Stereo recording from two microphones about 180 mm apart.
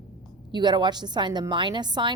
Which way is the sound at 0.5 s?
25° right (ahead or behind).